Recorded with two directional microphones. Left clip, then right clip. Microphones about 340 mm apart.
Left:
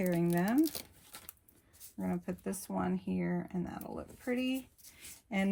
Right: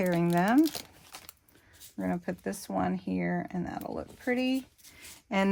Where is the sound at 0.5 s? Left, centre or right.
Centre.